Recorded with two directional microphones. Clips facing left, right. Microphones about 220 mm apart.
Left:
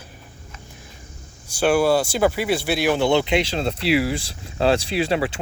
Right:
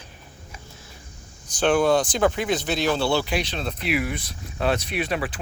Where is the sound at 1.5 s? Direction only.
10° left (ahead or behind).